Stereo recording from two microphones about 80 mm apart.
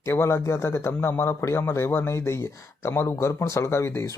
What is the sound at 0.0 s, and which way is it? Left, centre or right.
A man's voice, left.